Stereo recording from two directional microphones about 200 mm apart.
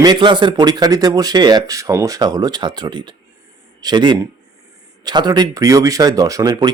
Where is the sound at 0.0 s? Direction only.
20° right (ahead or behind).